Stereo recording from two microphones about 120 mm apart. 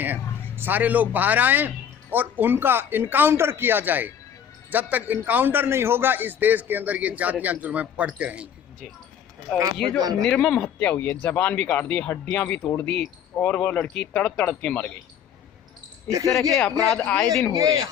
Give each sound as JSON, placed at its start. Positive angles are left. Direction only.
{"t": 0.0, "sound": "a man's voice", "side_deg": -15}
{"t": 9.7, "sound": "speech", "side_deg": 5}
{"t": 16.0, "sound": "speech", "side_deg": -25}
{"t": 17.0, "sound": "speech", "side_deg": 10}
{"t": 17.6, "sound": "speech", "side_deg": -25}